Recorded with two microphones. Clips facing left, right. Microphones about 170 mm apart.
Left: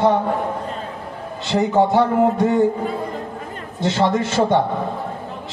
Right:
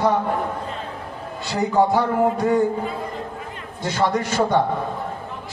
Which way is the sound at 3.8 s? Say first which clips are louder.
Left 3 dB; 20° left (ahead or behind).